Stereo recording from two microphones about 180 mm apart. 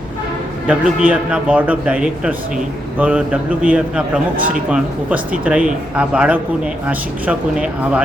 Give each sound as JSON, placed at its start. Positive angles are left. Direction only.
{"t": 0.7, "sound": "a man's voice", "side_deg": -5}